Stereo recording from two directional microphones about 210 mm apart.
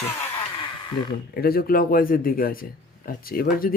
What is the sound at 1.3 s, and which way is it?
Speech, 45° left (ahead or behind).